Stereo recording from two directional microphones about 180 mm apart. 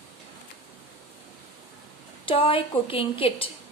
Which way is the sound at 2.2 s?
30° left (ahead or behind).